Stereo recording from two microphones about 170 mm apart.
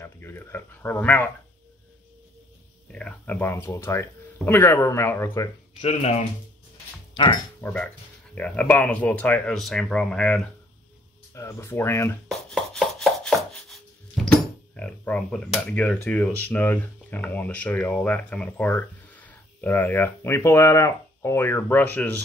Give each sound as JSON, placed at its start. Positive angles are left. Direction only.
{"t": 0.0, "sound": "speech", "side_deg": 15}
{"t": 2.9, "sound": "speech", "side_deg": 5}
{"t": 5.8, "sound": "speech", "side_deg": 35}
{"t": 7.6, "sound": "speech", "side_deg": 10}
{"t": 12.3, "sound": "chopping", "side_deg": 0}